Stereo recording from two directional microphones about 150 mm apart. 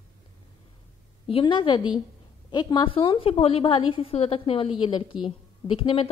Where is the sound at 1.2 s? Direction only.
35° left (ahead or behind).